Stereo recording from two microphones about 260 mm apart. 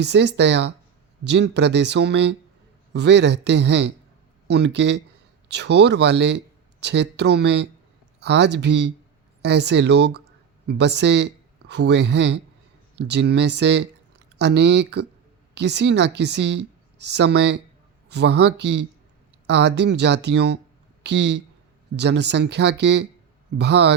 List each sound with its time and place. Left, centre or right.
0.0 s speech: right